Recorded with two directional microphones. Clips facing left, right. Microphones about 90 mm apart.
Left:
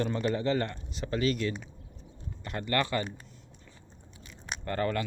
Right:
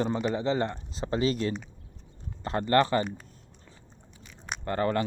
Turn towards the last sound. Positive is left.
turn(degrees=-25)  # may be behind; listen again after turning